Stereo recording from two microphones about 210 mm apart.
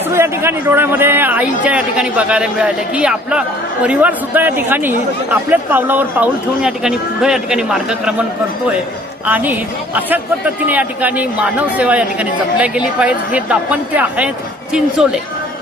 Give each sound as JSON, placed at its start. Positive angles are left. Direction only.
{"t": 0.1, "sound": "speech", "side_deg": -10}
{"t": 9.2, "sound": "speech", "side_deg": -10}